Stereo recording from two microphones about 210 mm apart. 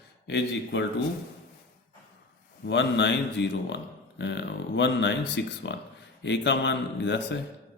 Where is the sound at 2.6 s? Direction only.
55° left (ahead or behind).